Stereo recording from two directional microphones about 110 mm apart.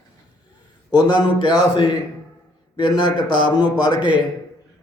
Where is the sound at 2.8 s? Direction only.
45° left (ahead or behind).